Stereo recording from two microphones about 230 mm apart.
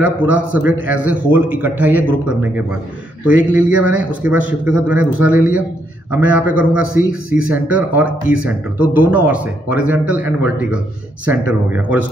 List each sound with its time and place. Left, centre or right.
0.0 s a man's voice: centre
3.3 s a man's voice: centre
6.9 s a man's voice: left
7.4 s a man's voice: centre